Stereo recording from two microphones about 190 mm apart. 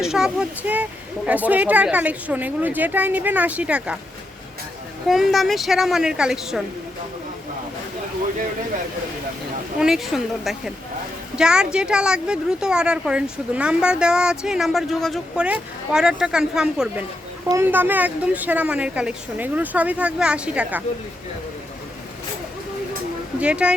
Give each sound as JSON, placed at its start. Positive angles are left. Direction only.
{"t": 0.0, "sound": "a woman's voice", "side_deg": -5}
{"t": 5.0, "sound": "speech", "side_deg": 0}
{"t": 9.8, "sound": "a woman's voice", "side_deg": 0}
{"t": 23.4, "sound": "speech", "side_deg": -5}